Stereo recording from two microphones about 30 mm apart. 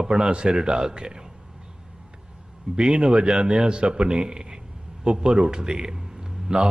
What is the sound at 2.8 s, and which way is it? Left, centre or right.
A man's voice, right.